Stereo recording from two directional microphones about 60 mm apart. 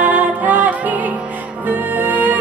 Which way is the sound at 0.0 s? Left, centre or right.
Right.